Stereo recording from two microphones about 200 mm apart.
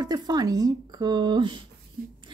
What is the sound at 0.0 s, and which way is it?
A woman's voice, 20° right (ahead or behind).